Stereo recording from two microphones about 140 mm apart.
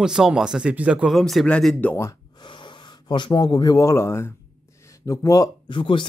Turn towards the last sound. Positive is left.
turn(degrees=35)  # may be behind; listen again after turning